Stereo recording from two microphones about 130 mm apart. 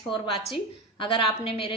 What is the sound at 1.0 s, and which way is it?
Speech, 45° left (ahead or behind).